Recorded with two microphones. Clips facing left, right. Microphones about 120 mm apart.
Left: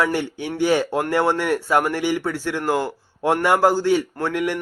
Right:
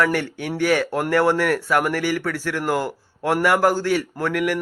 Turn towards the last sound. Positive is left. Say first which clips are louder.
# right 1 dB
turn(degrees=25)  # may be behind; listen again after turning